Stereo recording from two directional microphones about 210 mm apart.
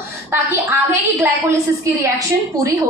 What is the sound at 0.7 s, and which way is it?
A woman's voice, 15° right (ahead or behind).